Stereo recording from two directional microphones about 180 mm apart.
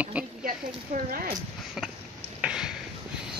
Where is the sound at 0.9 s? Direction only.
50° right (ahead or behind).